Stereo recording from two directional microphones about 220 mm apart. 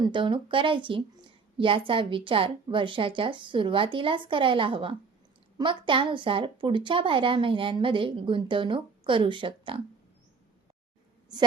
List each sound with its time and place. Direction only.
0.0 s a woman's voice: 20° right (ahead or behind)